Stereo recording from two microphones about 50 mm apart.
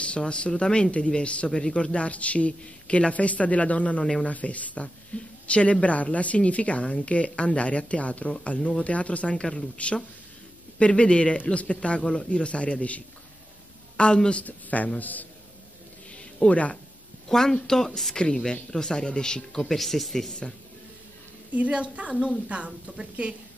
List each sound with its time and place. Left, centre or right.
0.0 s speech: left
14.4 s speech: left
16.4 s speech: left
17.3 s speech: centre
21.5 s a woman's voice: right